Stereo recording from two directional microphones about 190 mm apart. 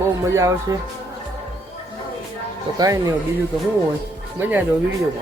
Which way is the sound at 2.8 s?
15° right (ahead or behind).